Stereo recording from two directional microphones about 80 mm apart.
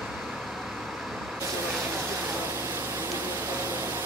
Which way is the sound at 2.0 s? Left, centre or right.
Right.